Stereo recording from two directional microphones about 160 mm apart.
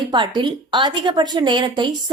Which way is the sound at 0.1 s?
30° right (ahead or behind).